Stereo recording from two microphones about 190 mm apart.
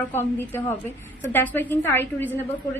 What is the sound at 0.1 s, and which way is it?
A woman's voice, 10° left (ahead or behind).